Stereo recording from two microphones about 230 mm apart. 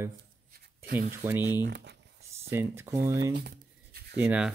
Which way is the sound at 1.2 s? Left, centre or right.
Centre.